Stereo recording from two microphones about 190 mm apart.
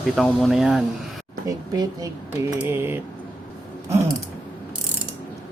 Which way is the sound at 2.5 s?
10° right (ahead or behind).